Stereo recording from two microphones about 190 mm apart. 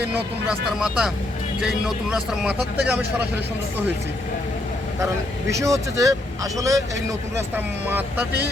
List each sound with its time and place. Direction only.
0.1 s speech: 5° right (ahead or behind)
5.5 s speech: 15° right (ahead or behind)